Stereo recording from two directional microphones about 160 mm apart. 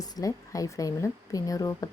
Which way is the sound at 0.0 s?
20° left (ahead or behind).